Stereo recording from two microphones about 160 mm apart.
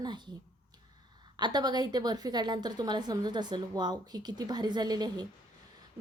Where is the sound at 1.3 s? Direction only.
25° right (ahead or behind).